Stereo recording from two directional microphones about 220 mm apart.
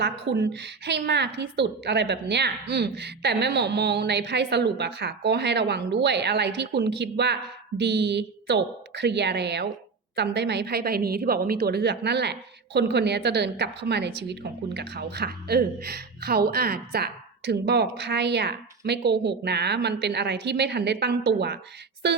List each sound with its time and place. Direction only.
0.0 s a woman's voice: 50° right (ahead or behind)